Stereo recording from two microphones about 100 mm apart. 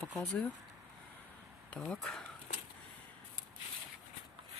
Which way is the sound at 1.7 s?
10° left (ahead or behind).